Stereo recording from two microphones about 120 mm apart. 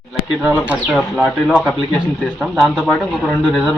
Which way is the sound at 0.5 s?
15° left (ahead or behind).